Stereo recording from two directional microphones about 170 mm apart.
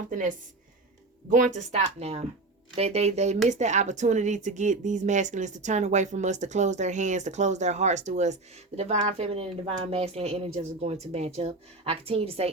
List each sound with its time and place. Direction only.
0.1 s speech: 50° right (ahead or behind); by 12.5 s 35° right (ahead or behind)